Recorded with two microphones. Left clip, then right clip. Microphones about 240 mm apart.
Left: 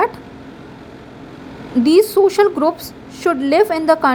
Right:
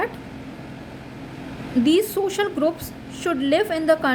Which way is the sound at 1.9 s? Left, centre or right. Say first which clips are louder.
Left 9 dB; centre.